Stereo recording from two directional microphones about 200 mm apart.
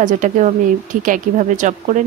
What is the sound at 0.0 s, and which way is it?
A woman's voice, 40° right (ahead or behind).